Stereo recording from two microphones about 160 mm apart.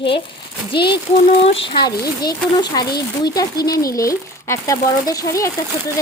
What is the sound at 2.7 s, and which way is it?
Speech, 25° left (ahead or behind).